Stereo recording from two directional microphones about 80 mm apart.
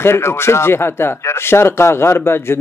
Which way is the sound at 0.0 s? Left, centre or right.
Left.